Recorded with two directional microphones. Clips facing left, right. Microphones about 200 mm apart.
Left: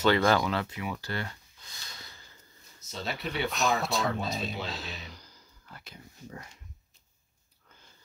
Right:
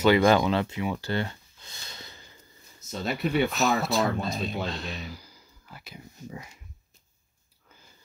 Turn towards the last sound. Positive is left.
turn(degrees=-10)  # may be behind; listen again after turning